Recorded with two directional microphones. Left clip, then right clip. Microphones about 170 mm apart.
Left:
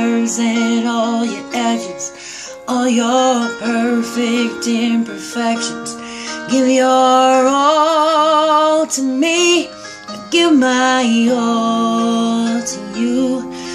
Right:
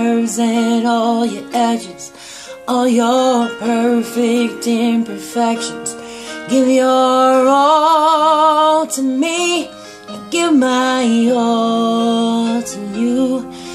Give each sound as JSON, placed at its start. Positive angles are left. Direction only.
{"t": 0.0, "sound": "music", "side_deg": -25}